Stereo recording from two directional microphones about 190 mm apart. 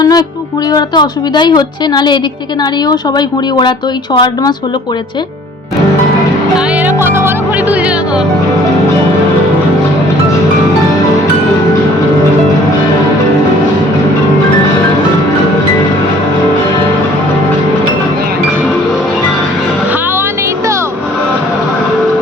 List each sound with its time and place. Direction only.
0.0 s music: 20° left (ahead or behind)
0.7 s speech: 20° left (ahead or behind)
6.8 s music: 10° right (ahead or behind)